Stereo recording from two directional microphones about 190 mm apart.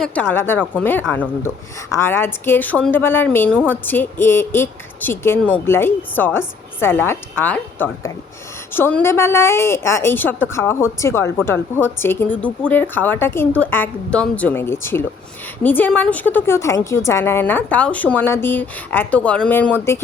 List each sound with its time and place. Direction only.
0.0 s a woman's voice: 10° left (ahead or behind)